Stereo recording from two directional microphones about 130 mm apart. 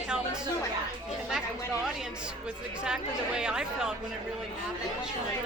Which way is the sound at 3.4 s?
5° right (ahead or behind).